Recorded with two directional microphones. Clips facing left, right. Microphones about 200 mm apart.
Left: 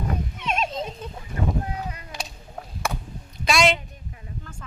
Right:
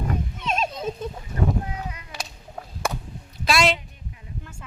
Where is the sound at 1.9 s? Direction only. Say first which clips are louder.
Left 2 dB; 35° left (ahead or behind).